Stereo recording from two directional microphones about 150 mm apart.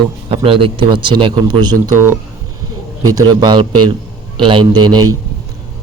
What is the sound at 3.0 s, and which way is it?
A man's voice, 30° right (ahead or behind).